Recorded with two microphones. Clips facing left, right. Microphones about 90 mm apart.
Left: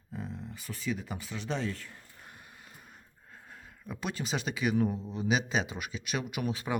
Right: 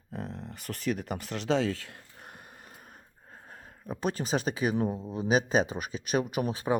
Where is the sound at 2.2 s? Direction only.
55° right (ahead or behind).